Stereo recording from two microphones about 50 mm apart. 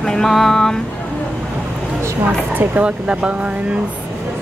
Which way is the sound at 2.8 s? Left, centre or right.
Right.